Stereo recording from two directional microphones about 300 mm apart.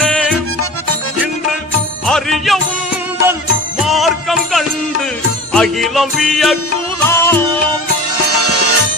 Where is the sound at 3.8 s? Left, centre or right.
Centre.